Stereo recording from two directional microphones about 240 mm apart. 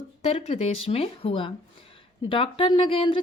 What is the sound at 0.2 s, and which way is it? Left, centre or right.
Speech, left.